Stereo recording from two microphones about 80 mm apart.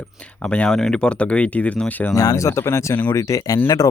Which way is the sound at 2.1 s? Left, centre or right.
Left.